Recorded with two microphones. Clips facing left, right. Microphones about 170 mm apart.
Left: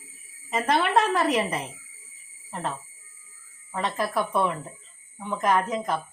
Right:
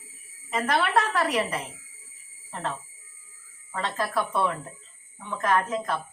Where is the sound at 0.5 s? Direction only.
20° left (ahead or behind).